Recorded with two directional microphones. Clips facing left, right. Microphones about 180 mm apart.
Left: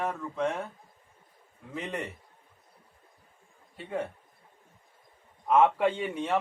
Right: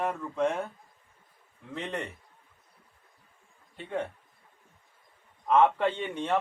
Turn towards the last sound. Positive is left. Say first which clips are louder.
# left 1 dB
turn(degrees=5)  # may be behind; listen again after turning